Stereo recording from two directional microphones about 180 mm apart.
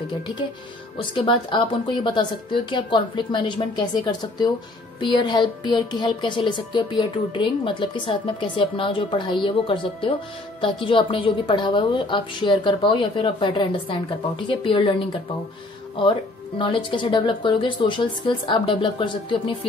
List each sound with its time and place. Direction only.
1.1 s speech: 25° left (ahead or behind)